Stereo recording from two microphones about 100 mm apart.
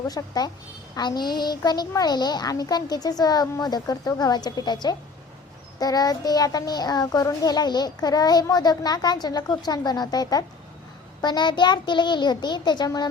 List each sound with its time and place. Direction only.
0.1 s a child's voice: 40° left (ahead or behind)